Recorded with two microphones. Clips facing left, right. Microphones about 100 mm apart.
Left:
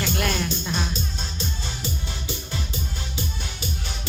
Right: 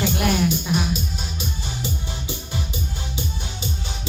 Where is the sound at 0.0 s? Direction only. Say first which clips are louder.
Right 5 dB; 15° right (ahead or behind).